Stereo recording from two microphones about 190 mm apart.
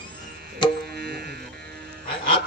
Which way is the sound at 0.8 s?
55° right (ahead or behind).